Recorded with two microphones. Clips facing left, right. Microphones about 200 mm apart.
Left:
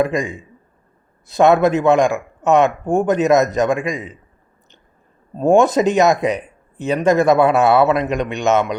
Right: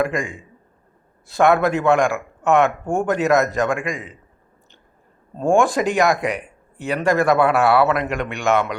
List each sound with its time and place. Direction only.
0.0 s speech: 20° left (ahead or behind)
5.4 s speech: 20° left (ahead or behind)